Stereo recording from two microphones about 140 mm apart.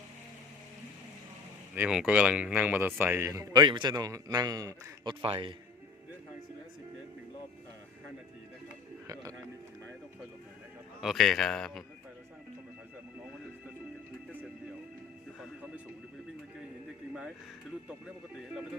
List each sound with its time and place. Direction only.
1.7 s speech: 10° right (ahead or behind); by 5.1 s 25° right (ahead or behind)
5.2 s speech: 40° right (ahead or behind)
11.0 s a man's voice: centre (ahead or behind)
15.4 s music: 10° right (ahead or behind)